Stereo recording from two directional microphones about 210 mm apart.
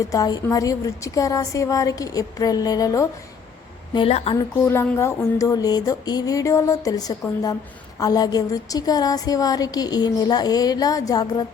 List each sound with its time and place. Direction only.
0.0 s a woman's voice: 15° left (ahead or behind)
3.9 s a woman's voice: 25° left (ahead or behind)
4.6 s a woman's voice: 10° left (ahead or behind)